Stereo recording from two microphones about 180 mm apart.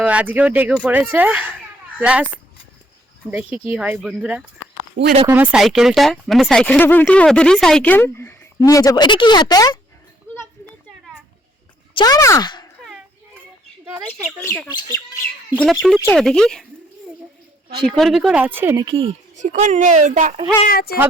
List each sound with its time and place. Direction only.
0.0 s speech: 5° right (ahead or behind)
3.2 s speech: 10° right (ahead or behind)
5.0 s speech: 40° right (ahead or behind)
5.3 s speech: 5° right (ahead or behind); by 9.7 s 20° left (ahead or behind)
11.9 s speech: 20° left (ahead or behind)
13.8 s speech: 15° right (ahead or behind)
14.3 s speech: 10° left (ahead or behind)
17.8 s speech: centre (ahead or behind)
18.9 s speech: 30° right (ahead or behind)
19.4 s speech: 40° right (ahead or behind)
20.7 s speech: 60° left (ahead or behind)